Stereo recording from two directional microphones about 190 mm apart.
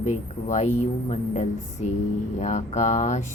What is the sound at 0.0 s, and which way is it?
Speech, 40° left (ahead or behind).